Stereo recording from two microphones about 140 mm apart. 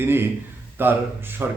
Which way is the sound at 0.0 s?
15° right (ahead or behind).